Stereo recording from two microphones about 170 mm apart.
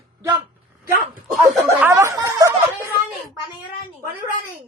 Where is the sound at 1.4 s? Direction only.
15° right (ahead or behind).